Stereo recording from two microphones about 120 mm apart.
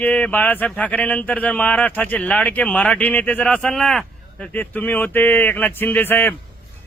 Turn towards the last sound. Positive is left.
turn(degrees=15)  # may be behind; listen again after turning